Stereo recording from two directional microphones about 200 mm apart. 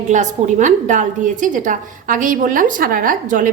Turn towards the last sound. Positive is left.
turn(degrees=-40)  # may be behind; listen again after turning